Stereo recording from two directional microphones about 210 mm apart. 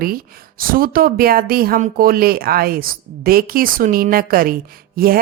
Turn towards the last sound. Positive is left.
turn(degrees=-45)  # may be behind; listen again after turning